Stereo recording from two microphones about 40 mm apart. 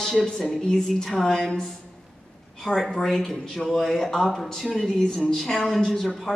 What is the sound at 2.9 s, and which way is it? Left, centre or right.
Speech, centre.